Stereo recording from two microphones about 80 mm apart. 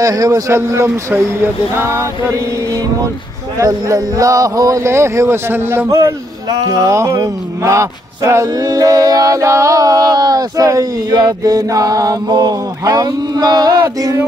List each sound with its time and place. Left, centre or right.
0.0 s a man's voice: right
3.5 s mantra: right
4.9 s a man's voice: right
5.9 s a man's voice: right
6.7 s mantra: right
12.3 s mantra: right